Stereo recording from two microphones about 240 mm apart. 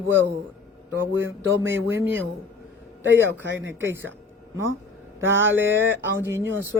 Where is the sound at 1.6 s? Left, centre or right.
Centre.